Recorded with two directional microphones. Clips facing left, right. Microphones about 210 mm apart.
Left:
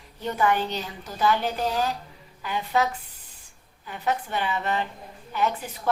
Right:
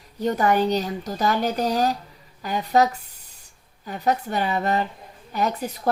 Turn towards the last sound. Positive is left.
turn(degrees=-40)  # may be behind; listen again after turning